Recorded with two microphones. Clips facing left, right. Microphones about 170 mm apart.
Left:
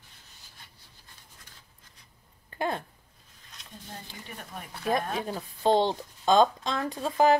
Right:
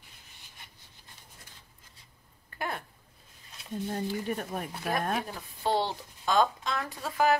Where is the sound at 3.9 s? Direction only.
50° right (ahead or behind).